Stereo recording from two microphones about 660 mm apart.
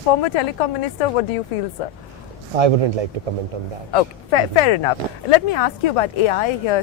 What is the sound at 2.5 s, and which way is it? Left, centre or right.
Speech, right.